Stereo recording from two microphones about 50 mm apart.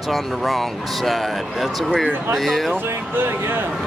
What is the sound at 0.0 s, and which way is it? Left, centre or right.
Speech, centre.